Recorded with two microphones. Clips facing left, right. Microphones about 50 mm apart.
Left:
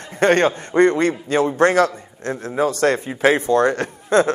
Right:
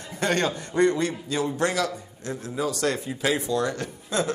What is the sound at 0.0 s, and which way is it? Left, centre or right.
A man's voice, left.